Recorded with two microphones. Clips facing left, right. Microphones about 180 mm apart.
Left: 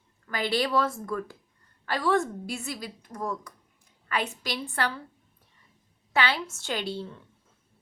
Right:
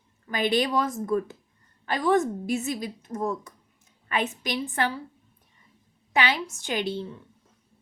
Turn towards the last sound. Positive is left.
turn(degrees=-20)  # may be behind; listen again after turning